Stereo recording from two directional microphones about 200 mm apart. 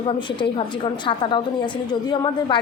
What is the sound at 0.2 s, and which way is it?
A woman's voice, 25° left (ahead or behind).